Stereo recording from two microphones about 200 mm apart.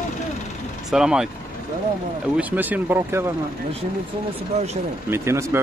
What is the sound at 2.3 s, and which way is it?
Speech, 10° right (ahead or behind).